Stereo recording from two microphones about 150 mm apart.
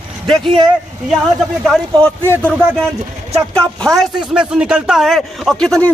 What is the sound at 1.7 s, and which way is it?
Speech, 5° left (ahead or behind).